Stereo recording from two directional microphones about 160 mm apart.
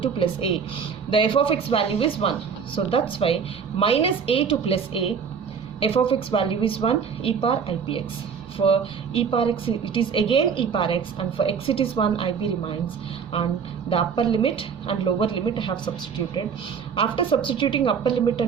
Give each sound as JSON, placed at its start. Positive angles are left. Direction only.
{"t": 0.0, "sound": "a woman's voice", "side_deg": 30}
{"t": 14.3, "sound": "a woman's voice", "side_deg": 35}
{"t": 16.9, "sound": "a woman's voice", "side_deg": 30}